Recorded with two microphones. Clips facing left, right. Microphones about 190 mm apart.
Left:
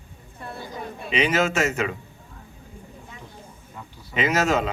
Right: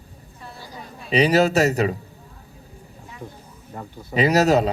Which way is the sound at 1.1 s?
35° right (ahead or behind).